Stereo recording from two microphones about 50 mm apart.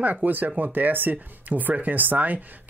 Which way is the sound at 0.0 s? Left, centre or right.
Right.